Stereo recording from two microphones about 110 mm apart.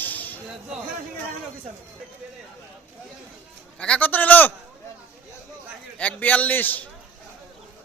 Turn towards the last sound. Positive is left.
turn(degrees=15)  # may be behind; listen again after turning